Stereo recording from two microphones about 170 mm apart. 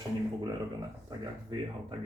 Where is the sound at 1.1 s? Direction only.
25° right (ahead or behind).